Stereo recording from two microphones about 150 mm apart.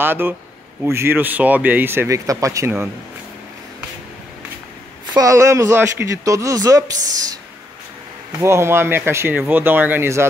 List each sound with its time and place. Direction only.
0.0 s speech: 15° right (ahead or behind)
5.1 s speech: 20° right (ahead or behind)
8.4 s speech: 15° right (ahead or behind)